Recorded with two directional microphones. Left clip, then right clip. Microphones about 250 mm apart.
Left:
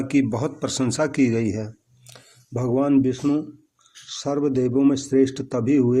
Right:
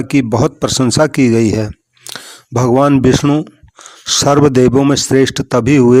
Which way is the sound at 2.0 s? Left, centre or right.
Right.